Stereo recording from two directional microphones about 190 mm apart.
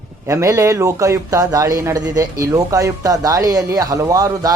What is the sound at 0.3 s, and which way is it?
A man's voice, 15° right (ahead or behind).